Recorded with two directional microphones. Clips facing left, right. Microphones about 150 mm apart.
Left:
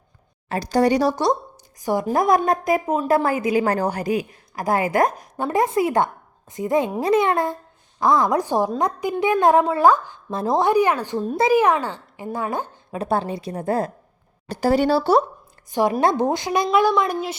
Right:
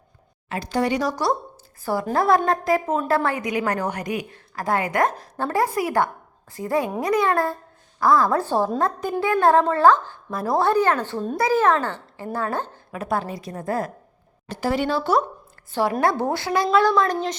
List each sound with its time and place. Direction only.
0.4 s a woman's voice: 35° left (ahead or behind)
1.1 s a woman's voice: 20° left (ahead or behind)
12.9 s a woman's voice: 30° left (ahead or behind)
14.4 s a woman's voice: 35° left (ahead or behind)
15.7 s a woman's voice: 20° left (ahead or behind)